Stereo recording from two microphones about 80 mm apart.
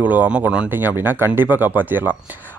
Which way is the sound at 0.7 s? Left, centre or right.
Right.